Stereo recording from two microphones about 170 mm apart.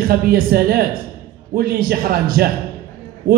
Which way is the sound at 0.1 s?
60° right (ahead or behind).